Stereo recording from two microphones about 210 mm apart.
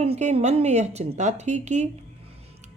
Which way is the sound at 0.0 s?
30° right (ahead or behind).